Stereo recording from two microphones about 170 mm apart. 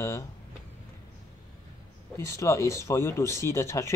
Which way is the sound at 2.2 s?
15° left (ahead or behind).